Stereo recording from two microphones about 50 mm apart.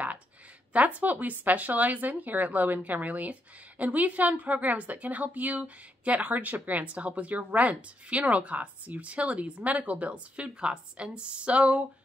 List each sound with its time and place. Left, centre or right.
0.7 s speech: right